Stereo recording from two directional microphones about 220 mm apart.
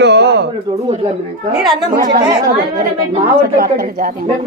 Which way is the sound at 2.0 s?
40° right (ahead or behind).